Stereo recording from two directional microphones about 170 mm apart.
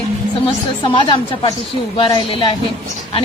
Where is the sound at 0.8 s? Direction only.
30° left (ahead or behind).